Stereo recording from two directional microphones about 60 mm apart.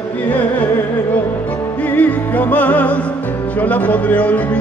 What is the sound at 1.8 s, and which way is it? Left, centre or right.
Music, left.